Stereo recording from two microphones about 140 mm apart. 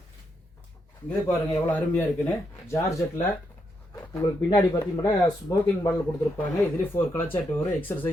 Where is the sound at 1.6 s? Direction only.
15° left (ahead or behind).